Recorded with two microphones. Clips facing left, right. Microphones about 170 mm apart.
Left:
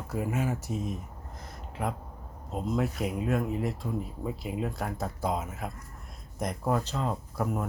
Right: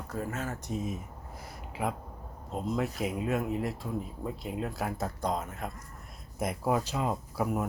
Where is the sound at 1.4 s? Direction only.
5° right (ahead or behind).